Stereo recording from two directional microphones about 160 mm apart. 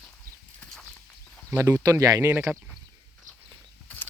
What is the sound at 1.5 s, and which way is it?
Speech, 20° right (ahead or behind).